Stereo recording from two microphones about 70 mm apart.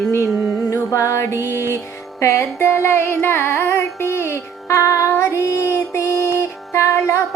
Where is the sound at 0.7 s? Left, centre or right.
Left.